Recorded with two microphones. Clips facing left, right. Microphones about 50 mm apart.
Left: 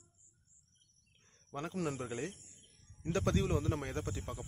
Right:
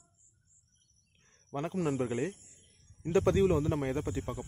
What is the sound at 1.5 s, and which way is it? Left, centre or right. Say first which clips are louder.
Speech: right 6 dB; centre.